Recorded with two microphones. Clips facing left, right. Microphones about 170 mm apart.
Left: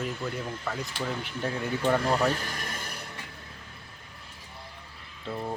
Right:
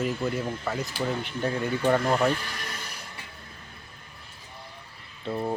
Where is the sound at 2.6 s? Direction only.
50° left (ahead or behind).